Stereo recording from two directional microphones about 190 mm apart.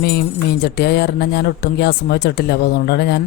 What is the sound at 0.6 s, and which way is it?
Speech, 60° left (ahead or behind).